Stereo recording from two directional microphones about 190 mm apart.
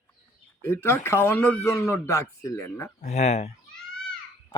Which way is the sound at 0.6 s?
10° left (ahead or behind).